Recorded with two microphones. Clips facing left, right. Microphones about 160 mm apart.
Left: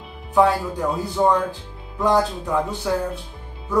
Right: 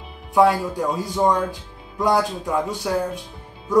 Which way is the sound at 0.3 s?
15° right (ahead or behind).